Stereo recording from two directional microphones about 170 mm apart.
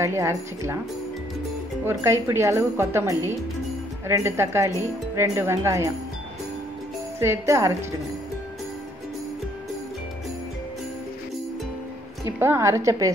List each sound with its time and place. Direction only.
0.0 s speech: 15° right (ahead or behind)
1.9 s speech: 15° right (ahead or behind)
7.2 s speech: 15° right (ahead or behind)
12.3 s speech: 15° right (ahead or behind)